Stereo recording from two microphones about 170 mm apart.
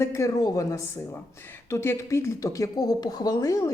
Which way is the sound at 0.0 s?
20° left (ahead or behind).